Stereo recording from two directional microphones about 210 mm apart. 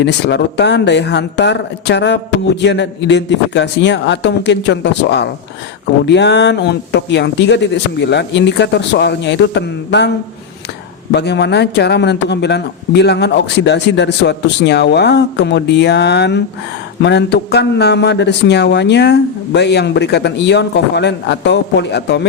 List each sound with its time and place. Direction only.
0.0 s speech: 55° left (ahead or behind)
11.1 s speech: 55° left (ahead or behind)